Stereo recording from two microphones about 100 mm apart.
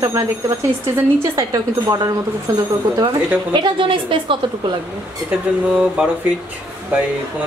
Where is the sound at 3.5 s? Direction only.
55° right (ahead or behind).